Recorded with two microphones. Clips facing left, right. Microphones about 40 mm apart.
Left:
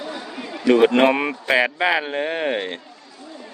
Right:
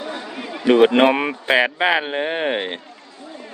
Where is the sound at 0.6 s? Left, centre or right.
Centre.